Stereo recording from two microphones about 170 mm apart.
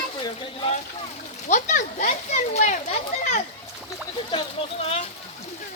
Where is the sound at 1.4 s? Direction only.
50° left (ahead or behind).